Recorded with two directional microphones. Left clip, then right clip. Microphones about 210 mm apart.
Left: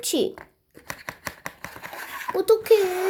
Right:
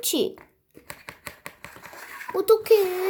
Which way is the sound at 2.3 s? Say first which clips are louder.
Even; 10° right (ahead or behind).